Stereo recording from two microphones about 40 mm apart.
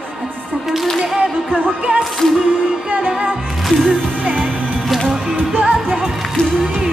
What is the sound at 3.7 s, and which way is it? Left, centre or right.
Music, centre.